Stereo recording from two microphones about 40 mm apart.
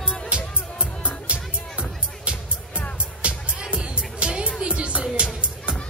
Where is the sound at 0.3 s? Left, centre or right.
Right.